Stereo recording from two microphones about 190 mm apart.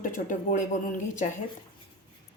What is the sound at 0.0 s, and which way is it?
Speech, 45° left (ahead or behind).